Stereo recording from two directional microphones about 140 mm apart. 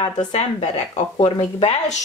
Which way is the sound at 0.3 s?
50° left (ahead or behind).